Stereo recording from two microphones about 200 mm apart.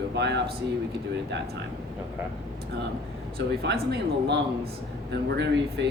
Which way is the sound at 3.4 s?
55° right (ahead or behind).